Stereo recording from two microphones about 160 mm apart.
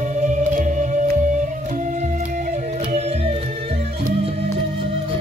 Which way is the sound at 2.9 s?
40° right (ahead or behind).